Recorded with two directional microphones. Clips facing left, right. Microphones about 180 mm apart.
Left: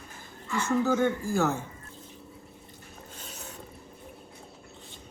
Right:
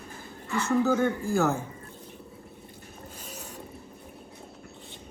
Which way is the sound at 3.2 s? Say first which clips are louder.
Right 1 dB; 10° right (ahead or behind).